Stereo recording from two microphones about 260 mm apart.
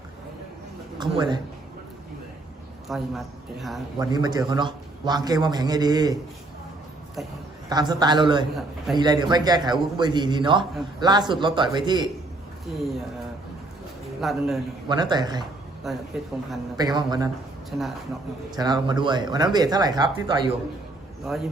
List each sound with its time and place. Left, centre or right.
0.9 s a sound: centre
2.9 s a man's voice: centre
3.9 s a man's voice: centre
7.2 s a man's voice: centre
7.7 s a man's voice: centre
14.2 s a man's voice: centre
14.8 s a man's voice: centre
15.9 s a man's voice: centre
16.7 s a man's voice: centre
17.7 s speech: centre
18.5 s a man's voice: centre
21.2 s a man's voice: centre